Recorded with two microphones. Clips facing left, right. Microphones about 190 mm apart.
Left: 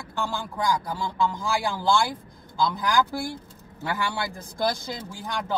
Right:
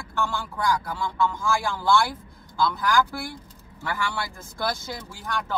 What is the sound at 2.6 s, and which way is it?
Speech, 15° left (ahead or behind).